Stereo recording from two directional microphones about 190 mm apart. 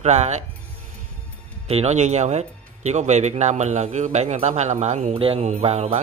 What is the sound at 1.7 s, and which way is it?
Speech, 35° right (ahead or behind).